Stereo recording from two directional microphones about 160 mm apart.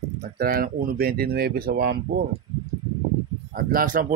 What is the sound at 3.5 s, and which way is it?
Speech, 65° right (ahead or behind).